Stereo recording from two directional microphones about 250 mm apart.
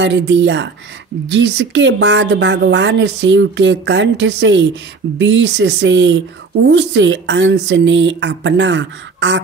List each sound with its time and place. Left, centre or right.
0.0 s speech: right